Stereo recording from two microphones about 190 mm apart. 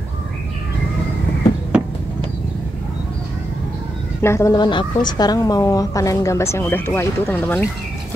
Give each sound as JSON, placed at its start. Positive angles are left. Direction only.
{"t": 4.2, "sound": "a woman's voice", "side_deg": 15}